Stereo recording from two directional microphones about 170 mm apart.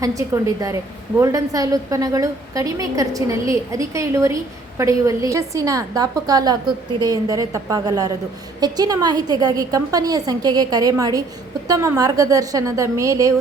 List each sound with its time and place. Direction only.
0.0 s a woman's voice: 20° right (ahead or behind)